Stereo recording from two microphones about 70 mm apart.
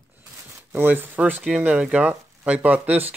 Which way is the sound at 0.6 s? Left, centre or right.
Right.